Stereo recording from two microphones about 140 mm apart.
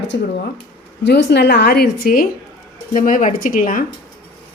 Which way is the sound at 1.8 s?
90° left.